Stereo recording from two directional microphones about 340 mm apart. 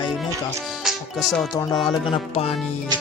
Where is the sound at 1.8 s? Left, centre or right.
Centre.